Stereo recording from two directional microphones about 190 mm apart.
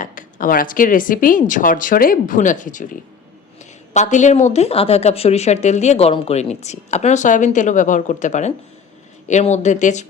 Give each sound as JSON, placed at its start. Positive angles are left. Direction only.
{"t": 0.0, "sound": "speech", "side_deg": 45}
{"t": 3.9, "sound": "speech", "side_deg": 40}